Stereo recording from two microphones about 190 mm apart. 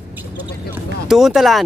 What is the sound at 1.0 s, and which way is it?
Speech, centre (ahead or behind).